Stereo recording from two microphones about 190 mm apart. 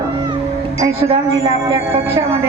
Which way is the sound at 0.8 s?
30° right (ahead or behind).